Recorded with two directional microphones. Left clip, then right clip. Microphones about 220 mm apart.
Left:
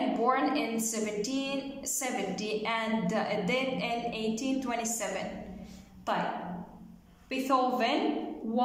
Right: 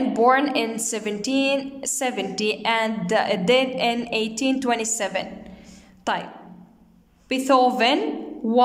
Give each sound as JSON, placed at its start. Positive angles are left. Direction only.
{"t": 0.1, "sound": "a woman's voice", "side_deg": -45}
{"t": 7.2, "sound": "a woman's voice", "side_deg": -45}